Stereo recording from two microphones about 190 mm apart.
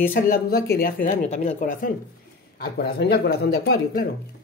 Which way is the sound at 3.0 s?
60° left (ahead or behind).